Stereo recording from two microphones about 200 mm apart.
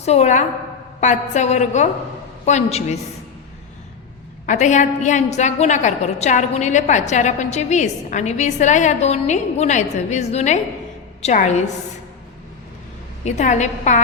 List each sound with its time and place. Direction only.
0.0 s a woman's voice: 35° left (ahead or behind)
4.4 s a woman's voice: 40° left (ahead or behind)
13.2 s a woman's voice: 35° left (ahead or behind)